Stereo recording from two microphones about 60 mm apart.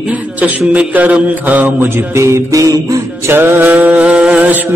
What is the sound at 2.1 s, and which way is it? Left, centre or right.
Music, right.